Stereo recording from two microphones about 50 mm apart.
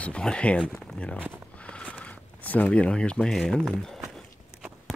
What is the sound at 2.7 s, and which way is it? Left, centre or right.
Speech, left.